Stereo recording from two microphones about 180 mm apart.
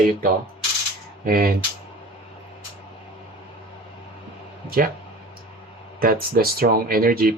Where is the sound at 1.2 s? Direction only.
55° right (ahead or behind).